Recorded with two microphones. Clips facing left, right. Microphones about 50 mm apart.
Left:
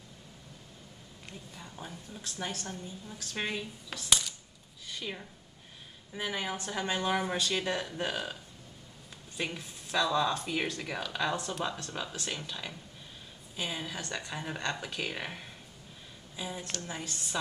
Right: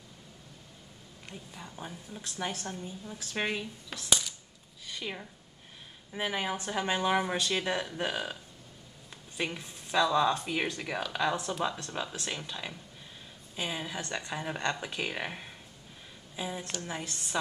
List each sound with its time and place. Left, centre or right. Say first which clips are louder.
1.5 s speech: right 2 dB; centre
3.9 s coin: left 1 dB; centre
4.8 s a sound: right 1 dB; centre
6.1 s speech: right 2 dB; centre
9.4 s speech: right 2 dB; centre